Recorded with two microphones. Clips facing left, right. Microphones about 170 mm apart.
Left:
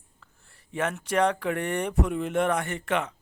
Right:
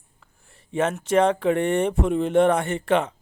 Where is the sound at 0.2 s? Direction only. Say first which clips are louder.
Right 3 dB; 20° right (ahead or behind).